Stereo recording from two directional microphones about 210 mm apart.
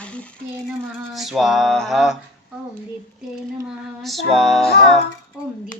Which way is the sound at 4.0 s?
Centre (ahead or behind).